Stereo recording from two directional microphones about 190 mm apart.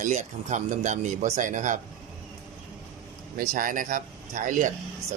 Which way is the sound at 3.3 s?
45° right (ahead or behind).